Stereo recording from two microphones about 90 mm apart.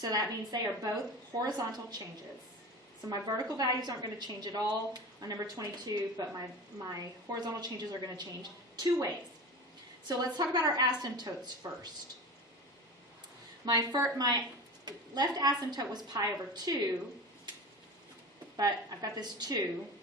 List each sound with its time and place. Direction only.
0.0 s a woman's voice: 45° right (ahead or behind)
10.1 s a woman's voice: 50° right (ahead or behind)
13.7 s a woman's voice: 45° right (ahead or behind)
18.5 s a woman's voice: 45° right (ahead or behind)